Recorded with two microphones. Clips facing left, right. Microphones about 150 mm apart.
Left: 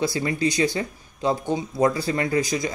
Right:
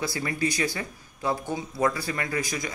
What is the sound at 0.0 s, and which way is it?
Speech, 25° left (ahead or behind).